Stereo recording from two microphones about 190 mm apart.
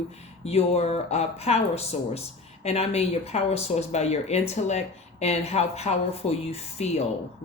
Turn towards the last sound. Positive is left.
turn(degrees=35)  # may be behind; listen again after turning